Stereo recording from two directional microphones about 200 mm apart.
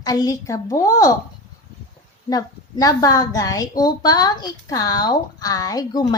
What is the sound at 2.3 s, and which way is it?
A woman's voice, 20° left (ahead or behind).